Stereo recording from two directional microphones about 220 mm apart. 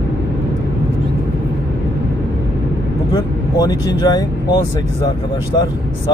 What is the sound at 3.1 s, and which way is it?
Speech, 15° left (ahead or behind).